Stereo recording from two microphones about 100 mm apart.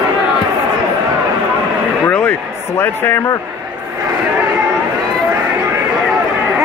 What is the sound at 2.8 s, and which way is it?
Speech, 20° left (ahead or behind).